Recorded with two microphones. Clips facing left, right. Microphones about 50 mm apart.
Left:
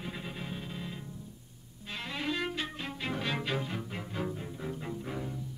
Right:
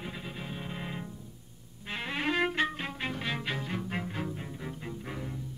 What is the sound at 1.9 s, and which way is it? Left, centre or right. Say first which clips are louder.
Violin: right 4 dB; right.